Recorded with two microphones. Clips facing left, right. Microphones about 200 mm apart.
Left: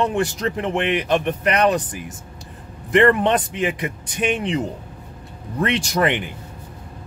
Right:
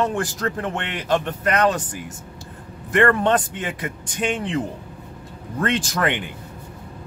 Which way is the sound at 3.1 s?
15° left (ahead or behind).